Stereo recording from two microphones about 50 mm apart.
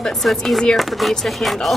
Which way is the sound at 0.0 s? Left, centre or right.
Centre.